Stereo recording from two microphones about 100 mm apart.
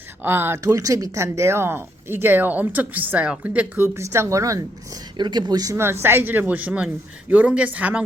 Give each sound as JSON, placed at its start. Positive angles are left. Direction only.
{"t": 0.2, "sound": "speech", "side_deg": -20}
{"t": 0.6, "sound": "speech", "side_deg": -35}
{"t": 3.8, "sound": "speech", "side_deg": -30}
{"t": 5.1, "sound": "speech", "side_deg": -50}
{"t": 5.7, "sound": "a woman's voice", "side_deg": -25}